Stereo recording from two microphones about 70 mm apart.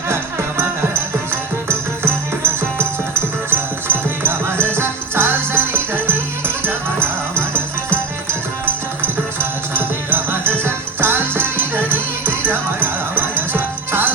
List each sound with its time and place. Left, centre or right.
1.6 s music: right